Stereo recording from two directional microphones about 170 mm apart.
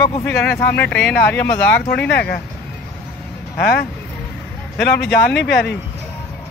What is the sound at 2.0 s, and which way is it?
Speech, 75° left (ahead or behind).